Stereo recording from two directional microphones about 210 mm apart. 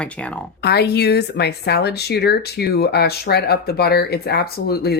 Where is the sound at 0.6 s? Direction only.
50° left (ahead or behind).